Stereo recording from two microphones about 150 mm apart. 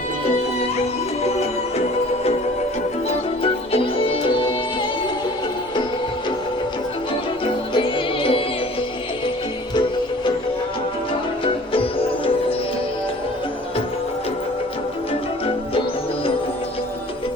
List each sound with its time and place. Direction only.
1.2 s music: 45° left (ahead or behind)
3.4 s music: 40° left (ahead or behind)
7.7 s music: 35° left (ahead or behind)
11.7 s music: 35° left (ahead or behind)